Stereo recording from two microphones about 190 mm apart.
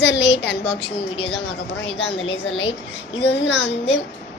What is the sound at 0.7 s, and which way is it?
Speech, 30° left (ahead or behind).